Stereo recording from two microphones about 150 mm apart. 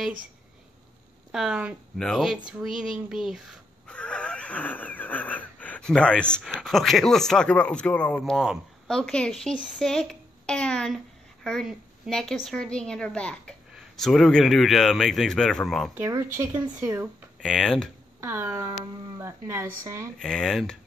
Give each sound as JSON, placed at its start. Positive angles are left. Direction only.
{"t": 1.3, "sound": "a woman's voice", "side_deg": -5}
{"t": 15.9, "sound": "speech", "side_deg": -15}
{"t": 17.4, "sound": "speech", "side_deg": 5}
{"t": 18.2, "sound": "speech", "side_deg": -15}
{"t": 20.2, "sound": "speech", "side_deg": 5}